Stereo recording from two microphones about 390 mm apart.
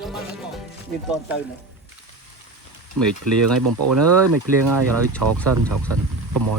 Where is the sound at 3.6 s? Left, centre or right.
Right.